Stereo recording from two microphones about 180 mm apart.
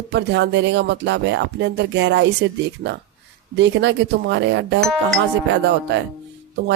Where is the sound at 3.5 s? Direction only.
75° right (ahead or behind).